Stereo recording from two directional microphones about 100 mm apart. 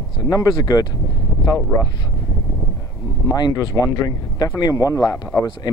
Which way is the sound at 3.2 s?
40° left (ahead or behind).